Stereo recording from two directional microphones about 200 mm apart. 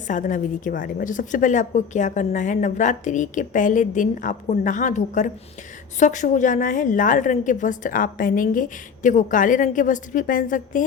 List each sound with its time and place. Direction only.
0.1 s a woman's voice: 40° left (ahead or behind)